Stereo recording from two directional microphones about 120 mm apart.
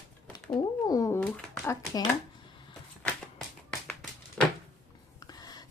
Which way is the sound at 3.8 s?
5° left (ahead or behind).